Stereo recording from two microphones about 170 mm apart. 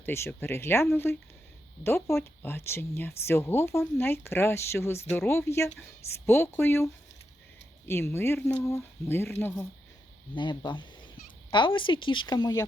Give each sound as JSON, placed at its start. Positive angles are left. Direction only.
{"t": 0.0, "sound": "speech", "side_deg": 15}
{"t": 10.3, "sound": "speech", "side_deg": 25}